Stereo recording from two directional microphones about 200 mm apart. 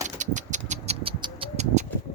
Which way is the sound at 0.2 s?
40° right (ahead or behind).